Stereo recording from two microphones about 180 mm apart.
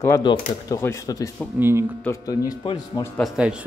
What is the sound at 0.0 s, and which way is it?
Speech, 20° left (ahead or behind).